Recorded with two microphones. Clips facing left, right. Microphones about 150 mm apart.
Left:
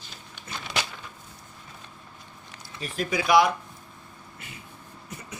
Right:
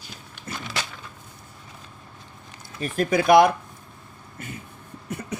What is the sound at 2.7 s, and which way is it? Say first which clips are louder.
Speech: right 6 dB; 50° right (ahead or behind).